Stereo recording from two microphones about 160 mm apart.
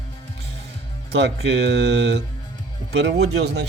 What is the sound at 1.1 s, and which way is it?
Speech, 90° right.